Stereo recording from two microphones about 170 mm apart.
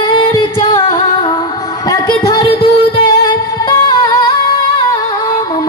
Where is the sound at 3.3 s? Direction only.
25° left (ahead or behind).